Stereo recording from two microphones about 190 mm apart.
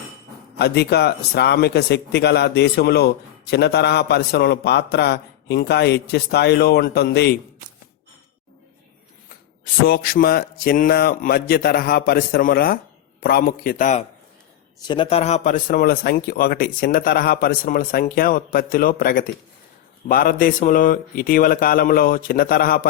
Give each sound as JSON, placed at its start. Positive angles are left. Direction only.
{"t": 0.6, "sound": "speech", "side_deg": 60}
{"t": 9.8, "sound": "a man's voice", "side_deg": 50}
{"t": 14.8, "sound": "a man's voice", "side_deg": 25}